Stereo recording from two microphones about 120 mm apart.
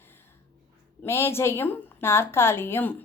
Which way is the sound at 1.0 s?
20° left (ahead or behind).